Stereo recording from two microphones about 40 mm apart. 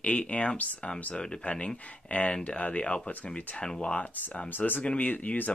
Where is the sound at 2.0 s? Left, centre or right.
Left.